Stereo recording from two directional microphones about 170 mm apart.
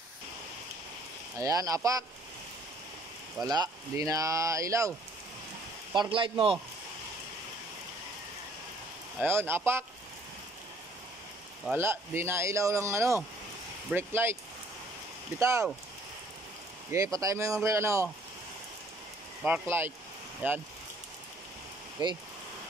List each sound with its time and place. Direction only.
1.4 s speech: 20° right (ahead or behind)
3.4 s speech: 20° right (ahead or behind)
5.9 s speech: 30° right (ahead or behind)
9.2 s speech: 15° right (ahead or behind)
11.7 s speech: 15° right (ahead or behind)
15.3 s speech: 15° right (ahead or behind)
16.9 s speech: 20° right (ahead or behind)
19.4 s speech: 10° right (ahead or behind)
22.0 s speech: 25° right (ahead or behind)